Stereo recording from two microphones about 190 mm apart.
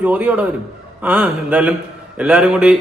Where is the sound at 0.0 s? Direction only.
10° right (ahead or behind).